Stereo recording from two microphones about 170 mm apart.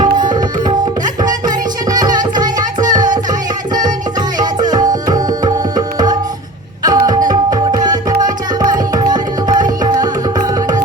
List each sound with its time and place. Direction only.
1.2 s music: 25° right (ahead or behind)
4.4 s tabla: 25° right (ahead or behind)
6.8 s music: 20° right (ahead or behind)